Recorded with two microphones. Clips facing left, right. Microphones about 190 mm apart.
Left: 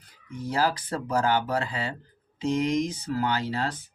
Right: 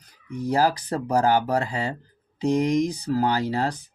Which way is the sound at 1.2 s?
35° right (ahead or behind).